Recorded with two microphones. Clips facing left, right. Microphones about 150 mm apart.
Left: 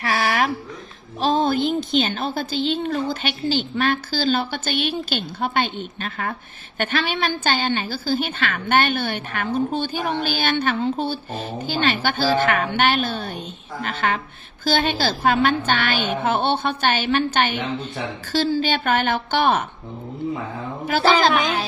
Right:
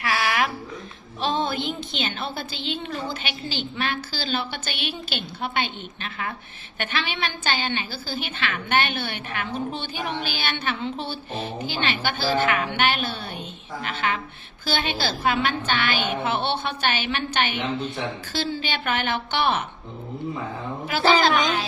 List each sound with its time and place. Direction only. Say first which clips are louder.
0.0 s a sound: left 3 dB; 35° left (ahead or behind)
1.2 s a woman's voice: left 6 dB; 40° left (ahead or behind)
20.8 s a woman's voice: left 2 dB; 40° left (ahead or behind)